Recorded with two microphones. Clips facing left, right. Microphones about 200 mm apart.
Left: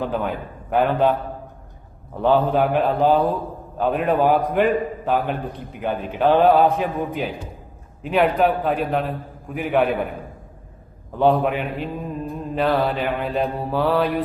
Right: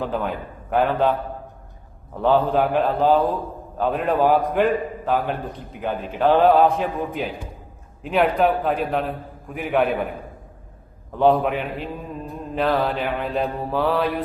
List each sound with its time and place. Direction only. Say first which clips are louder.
0.0 s a man's voice: left 1 dB; centre (ahead or behind)
2.2 s a man's voice: left 1 dB; centre (ahead or behind)
11.2 s a man's voice: even; centre (ahead or behind)